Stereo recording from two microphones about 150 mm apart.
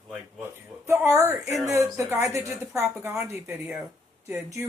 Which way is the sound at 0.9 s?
15° right (ahead or behind).